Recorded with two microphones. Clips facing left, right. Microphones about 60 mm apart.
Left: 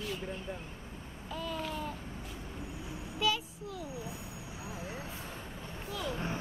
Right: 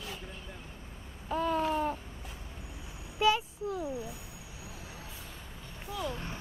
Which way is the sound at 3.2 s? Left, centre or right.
Right.